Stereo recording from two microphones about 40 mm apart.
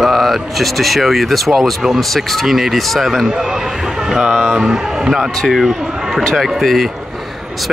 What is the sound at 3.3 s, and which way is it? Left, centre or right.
A man's voice, right.